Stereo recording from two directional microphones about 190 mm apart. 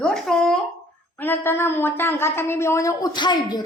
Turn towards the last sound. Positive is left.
turn(degrees=20)  # may be behind; listen again after turning